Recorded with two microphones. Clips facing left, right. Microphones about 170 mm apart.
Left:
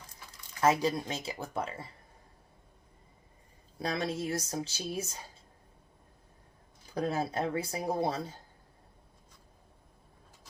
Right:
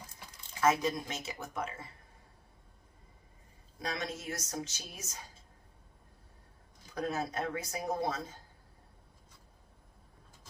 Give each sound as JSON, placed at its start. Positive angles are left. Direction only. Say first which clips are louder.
{"t": 0.6, "sound": "speech", "louder": "left 2 dB", "side_deg": 30}
{"t": 3.8, "sound": "speech", "louder": "left 6 dB", "side_deg": 30}
{"t": 6.9, "sound": "speech", "louder": "left 3 dB", "side_deg": 30}